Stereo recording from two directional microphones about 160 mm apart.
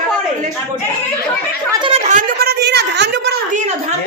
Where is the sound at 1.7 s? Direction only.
30° right (ahead or behind).